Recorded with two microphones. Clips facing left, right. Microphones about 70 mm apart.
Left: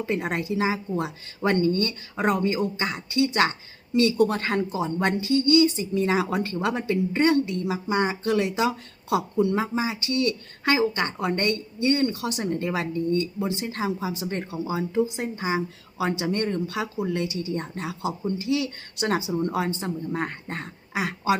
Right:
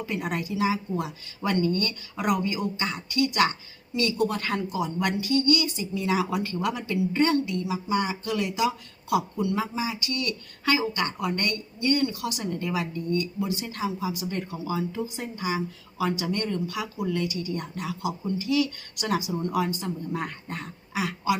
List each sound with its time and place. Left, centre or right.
0.0 s a woman's voice: left
2.7 s a woman's voice: left
5.6 s a woman's voice: left
7.4 s a woman's voice: left